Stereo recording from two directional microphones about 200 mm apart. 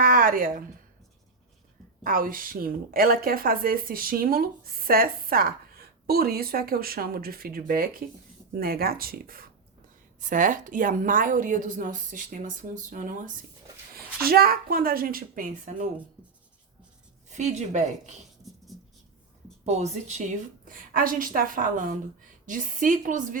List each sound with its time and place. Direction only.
0.0 s a sound: 45° right (ahead or behind)
2.0 s a woman's voice: 45° right (ahead or behind)
17.2 s a woman's voice: 35° right (ahead or behind)
18.4 s writing: centre (ahead or behind)
19.6 s a woman's voice: 35° right (ahead or behind)